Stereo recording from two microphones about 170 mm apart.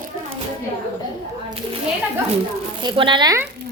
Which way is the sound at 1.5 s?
30° right (ahead or behind).